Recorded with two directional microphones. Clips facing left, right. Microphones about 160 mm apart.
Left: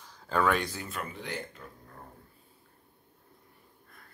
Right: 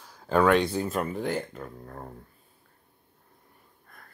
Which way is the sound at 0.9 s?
45° right (ahead or behind).